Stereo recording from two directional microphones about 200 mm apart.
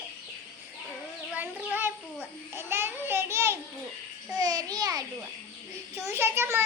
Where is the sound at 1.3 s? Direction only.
10° right (ahead or behind).